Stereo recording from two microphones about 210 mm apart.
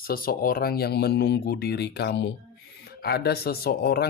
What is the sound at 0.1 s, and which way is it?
Speech, 45° left (ahead or behind).